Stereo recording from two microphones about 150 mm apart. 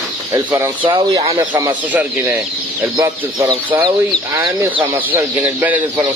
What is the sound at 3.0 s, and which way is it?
Speech, 20° right (ahead or behind).